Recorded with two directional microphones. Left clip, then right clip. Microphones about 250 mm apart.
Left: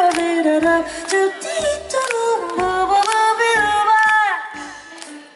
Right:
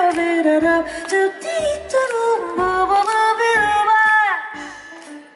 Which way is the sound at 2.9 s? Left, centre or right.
Centre.